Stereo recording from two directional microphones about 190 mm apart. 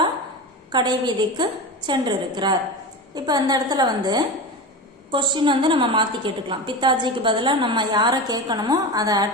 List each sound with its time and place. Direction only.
0.7 s a woman's voice: 25° right (ahead or behind)